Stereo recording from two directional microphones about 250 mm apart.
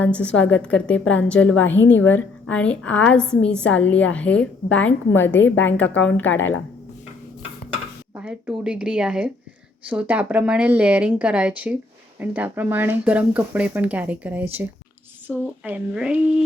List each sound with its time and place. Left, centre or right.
0.0 s a woman's voice: centre
1.5 s a woman's voice: left
2.1 s a woman's voice: centre
6.3 s a woman's voice: left
8.1 s a woman's voice: centre